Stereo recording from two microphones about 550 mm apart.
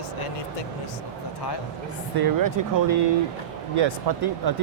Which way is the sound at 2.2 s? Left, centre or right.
Right.